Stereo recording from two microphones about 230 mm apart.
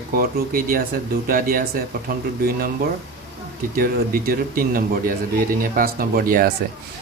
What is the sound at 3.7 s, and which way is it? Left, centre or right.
Speech, right.